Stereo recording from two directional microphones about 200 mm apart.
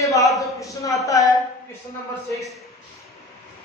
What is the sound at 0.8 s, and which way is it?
Speech, 15° left (ahead or behind).